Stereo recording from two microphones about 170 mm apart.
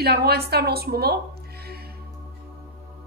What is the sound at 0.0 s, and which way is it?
A woman's voice, 70° right (ahead or behind).